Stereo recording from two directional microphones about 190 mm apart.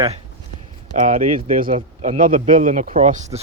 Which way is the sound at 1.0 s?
45° right (ahead or behind).